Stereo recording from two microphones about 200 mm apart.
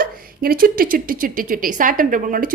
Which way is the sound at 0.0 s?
45° right (ahead or behind).